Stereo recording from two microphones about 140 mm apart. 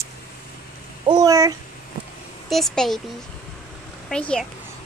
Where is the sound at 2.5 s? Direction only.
Centre (ahead or behind).